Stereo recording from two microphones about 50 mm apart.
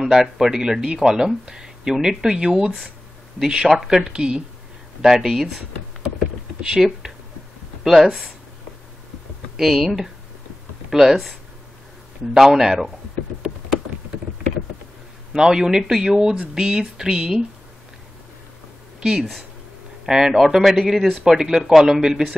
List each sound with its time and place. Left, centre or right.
0.0 s speech: centre
6.6 s speech: centre
9.6 s speech: centre
12.4 s speech: centre
15.3 s speech: centre
18.9 s speech: centre